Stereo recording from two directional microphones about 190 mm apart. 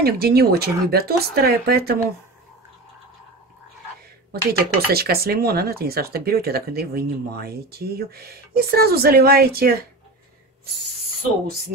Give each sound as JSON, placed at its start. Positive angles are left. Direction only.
{"t": 0.0, "sound": "speech", "side_deg": -55}
{"t": 4.3, "sound": "speech", "side_deg": -55}